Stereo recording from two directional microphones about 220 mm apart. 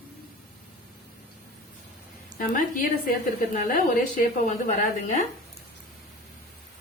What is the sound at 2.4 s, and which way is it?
A woman's voice, 40° left (ahead or behind).